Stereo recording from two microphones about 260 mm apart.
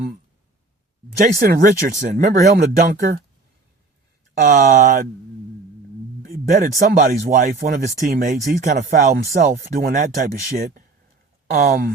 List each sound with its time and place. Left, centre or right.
1.2 s speech: right
4.4 s speech: right
6.5 s speech: right